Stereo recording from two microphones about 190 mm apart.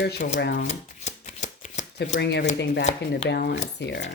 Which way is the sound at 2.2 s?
65° left (ahead or behind).